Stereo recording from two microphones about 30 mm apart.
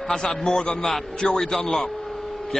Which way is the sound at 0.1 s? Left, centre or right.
Centre.